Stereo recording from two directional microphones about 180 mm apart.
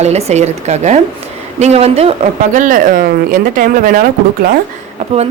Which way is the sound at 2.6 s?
45° right (ahead or behind).